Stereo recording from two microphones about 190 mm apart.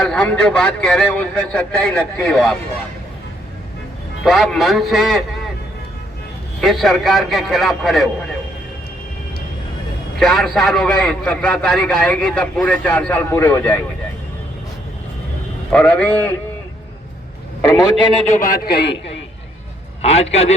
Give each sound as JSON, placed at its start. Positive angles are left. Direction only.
{"t": 0.0, "sound": "a man's voice", "side_deg": 5}
{"t": 4.2, "sound": "a man's voice", "side_deg": 0}
{"t": 6.6, "sound": "a man's voice", "side_deg": 0}
{"t": 10.2, "sound": "a man's voice", "side_deg": 0}
{"t": 15.7, "sound": "speech", "side_deg": 5}
{"t": 17.6, "sound": "a man's voice", "side_deg": 20}
{"t": 18.6, "sound": "a man's voice", "side_deg": 55}
{"t": 20.0, "sound": "a man's voice", "side_deg": 35}